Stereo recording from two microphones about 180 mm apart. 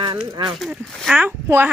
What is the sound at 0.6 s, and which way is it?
Speech, centre (ahead or behind).